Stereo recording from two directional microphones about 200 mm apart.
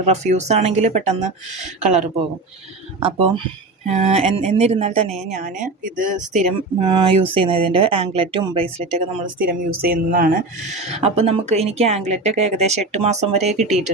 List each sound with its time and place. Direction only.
0.0 s speech: 35° right (ahead or behind)
6.8 s speech: 25° right (ahead or behind)
9.4 s speech: 45° right (ahead or behind)